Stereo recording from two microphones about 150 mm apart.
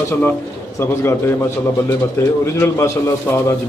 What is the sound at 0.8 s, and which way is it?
A man's voice, 15° left (ahead or behind).